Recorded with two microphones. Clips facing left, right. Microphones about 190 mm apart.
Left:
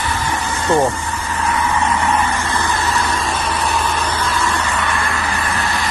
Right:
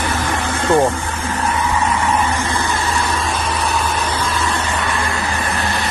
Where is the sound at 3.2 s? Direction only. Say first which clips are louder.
Even; centre (ahead or behind).